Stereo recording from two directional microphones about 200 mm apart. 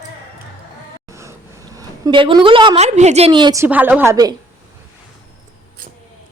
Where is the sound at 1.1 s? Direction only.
15° right (ahead or behind).